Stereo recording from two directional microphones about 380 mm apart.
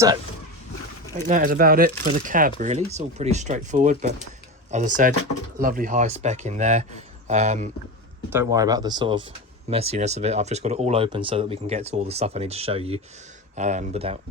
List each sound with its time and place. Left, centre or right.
1.1 s speech: right